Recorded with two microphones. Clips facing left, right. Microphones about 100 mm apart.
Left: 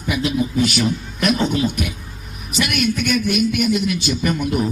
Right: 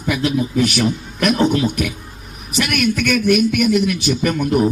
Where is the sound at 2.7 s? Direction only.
60° right (ahead or behind).